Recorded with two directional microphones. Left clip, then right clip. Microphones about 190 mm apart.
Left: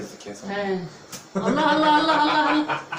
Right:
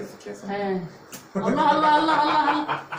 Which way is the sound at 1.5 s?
Centre (ahead or behind).